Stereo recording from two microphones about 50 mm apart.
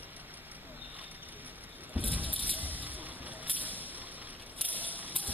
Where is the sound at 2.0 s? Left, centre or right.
Right.